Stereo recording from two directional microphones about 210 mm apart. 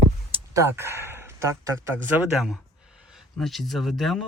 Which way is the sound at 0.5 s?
10° right (ahead or behind).